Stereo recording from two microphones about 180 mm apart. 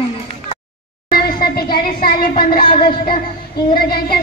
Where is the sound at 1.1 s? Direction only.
55° left (ahead or behind).